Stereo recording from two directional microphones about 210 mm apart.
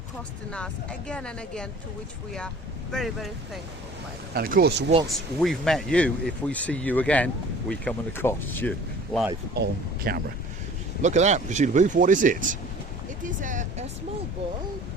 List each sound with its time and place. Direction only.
0.5 s speech: 5° left (ahead or behind)
2.9 s speech: centre (ahead or behind)
4.4 s speech: 45° right (ahead or behind)
5.0 s speech: centre (ahead or behind)
9.6 s speech: 50° right (ahead or behind)
11.0 s speech: 35° right (ahead or behind)